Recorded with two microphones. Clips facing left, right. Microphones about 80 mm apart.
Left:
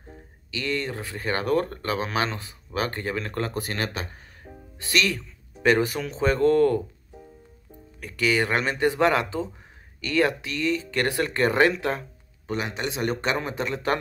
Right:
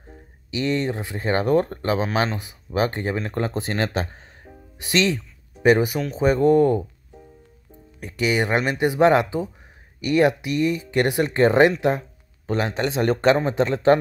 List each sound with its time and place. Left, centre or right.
0.5 s speech: right
8.0 s speech: right
12.4 s a man's voice: right